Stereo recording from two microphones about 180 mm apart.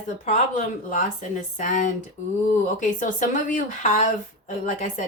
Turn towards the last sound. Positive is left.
turn(degrees=45)  # may be behind; listen again after turning